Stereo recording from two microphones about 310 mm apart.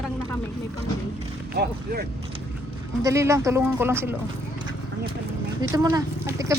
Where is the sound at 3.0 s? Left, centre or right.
Centre.